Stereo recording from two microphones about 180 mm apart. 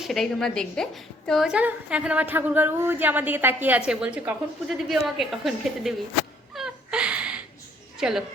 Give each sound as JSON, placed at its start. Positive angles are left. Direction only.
{"t": 0.0, "sound": "a woman's voice", "side_deg": 0}
{"t": 6.5, "sound": "a sound", "side_deg": 0}
{"t": 7.9, "sound": "a woman's voice", "side_deg": -5}